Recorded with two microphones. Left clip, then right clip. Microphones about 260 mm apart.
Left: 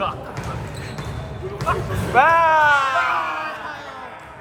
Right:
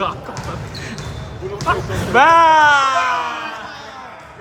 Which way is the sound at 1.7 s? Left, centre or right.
Right.